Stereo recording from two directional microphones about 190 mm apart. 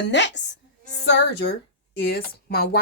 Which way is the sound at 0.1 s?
70° left (ahead or behind).